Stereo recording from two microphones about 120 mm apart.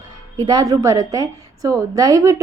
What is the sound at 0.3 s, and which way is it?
A woman's voice, 35° right (ahead or behind).